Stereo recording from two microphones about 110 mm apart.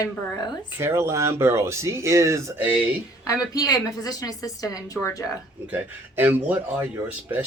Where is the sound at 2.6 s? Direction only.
15° right (ahead or behind).